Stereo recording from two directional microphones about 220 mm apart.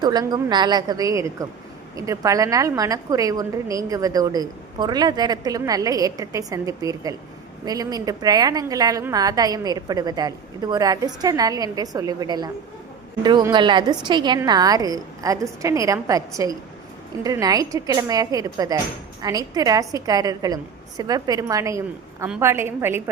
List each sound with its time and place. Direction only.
0.0 s a woman's voice: 20° right (ahead or behind)